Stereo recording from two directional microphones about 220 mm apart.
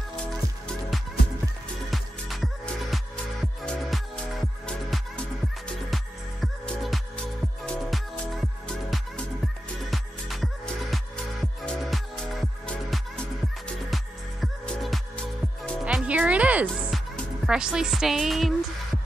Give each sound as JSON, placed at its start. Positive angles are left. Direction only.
{"t": 1.9, "sound": "music", "side_deg": 0}
{"t": 6.4, "sound": "music", "side_deg": 0}